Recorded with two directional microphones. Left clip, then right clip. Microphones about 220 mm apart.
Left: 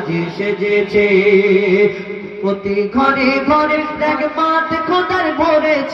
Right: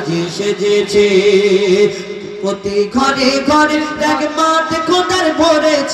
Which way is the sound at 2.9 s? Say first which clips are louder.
Left 1 dB; 65° right (ahead or behind).